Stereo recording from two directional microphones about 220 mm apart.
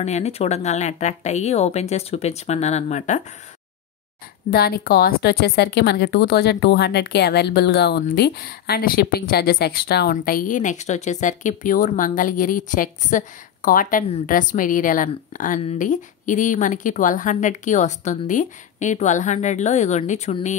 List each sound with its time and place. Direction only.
0.0 s speech: 30° left (ahead or behind)
4.5 s a woman's voice: 45° left (ahead or behind)